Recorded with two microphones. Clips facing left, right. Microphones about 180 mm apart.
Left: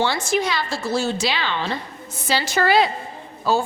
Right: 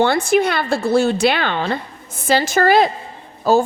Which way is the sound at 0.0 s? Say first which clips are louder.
Right 6 dB; 55° right (ahead or behind).